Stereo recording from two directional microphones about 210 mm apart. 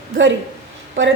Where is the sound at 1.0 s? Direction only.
65° right (ahead or behind).